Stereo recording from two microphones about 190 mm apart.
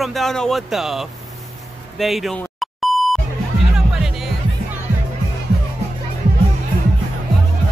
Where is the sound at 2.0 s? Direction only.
Centre (ahead or behind).